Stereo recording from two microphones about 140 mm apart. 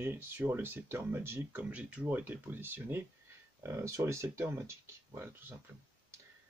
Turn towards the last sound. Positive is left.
turn(degrees=-15)  # may be behind; listen again after turning